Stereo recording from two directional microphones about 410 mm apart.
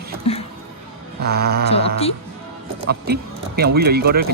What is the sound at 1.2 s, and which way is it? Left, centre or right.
Speech, right.